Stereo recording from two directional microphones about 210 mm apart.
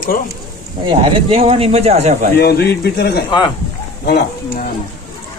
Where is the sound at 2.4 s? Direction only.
50° left (ahead or behind).